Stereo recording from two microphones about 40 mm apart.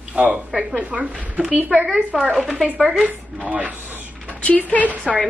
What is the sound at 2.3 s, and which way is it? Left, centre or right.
Speech, centre.